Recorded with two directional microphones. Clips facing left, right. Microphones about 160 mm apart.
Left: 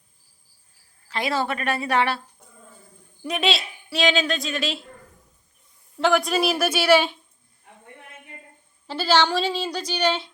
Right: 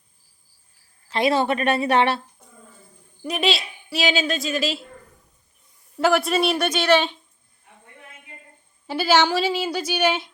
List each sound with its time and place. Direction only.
1.1 s speech: 20° right (ahead or behind)
3.2 s speech: centre (ahead or behind)
6.0 s speech: centre (ahead or behind)
8.9 s speech: 10° right (ahead or behind)